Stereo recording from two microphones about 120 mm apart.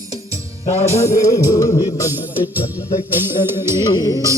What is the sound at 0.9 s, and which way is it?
Music, 25° left (ahead or behind).